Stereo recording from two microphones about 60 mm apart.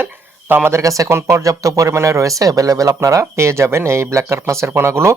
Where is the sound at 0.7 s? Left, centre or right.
Right.